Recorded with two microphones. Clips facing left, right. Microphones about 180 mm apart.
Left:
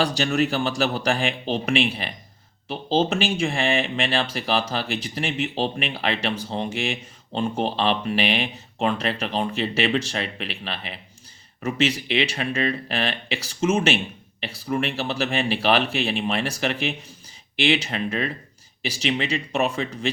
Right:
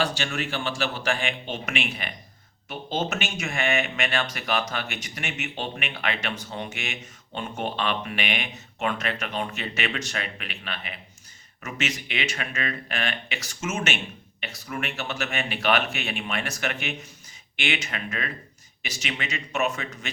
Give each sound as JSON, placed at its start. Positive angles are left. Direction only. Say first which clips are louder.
{"t": 0.0, "sound": "speech", "louder": "left 6 dB", "side_deg": 35}